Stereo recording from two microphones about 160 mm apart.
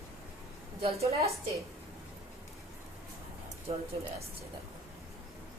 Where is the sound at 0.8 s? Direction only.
40° right (ahead or behind).